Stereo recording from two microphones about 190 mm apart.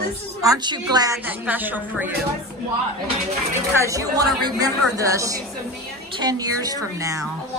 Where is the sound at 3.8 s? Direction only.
20° right (ahead or behind).